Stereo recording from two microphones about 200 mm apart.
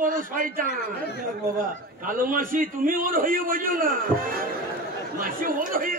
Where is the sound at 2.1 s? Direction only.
45° right (ahead or behind).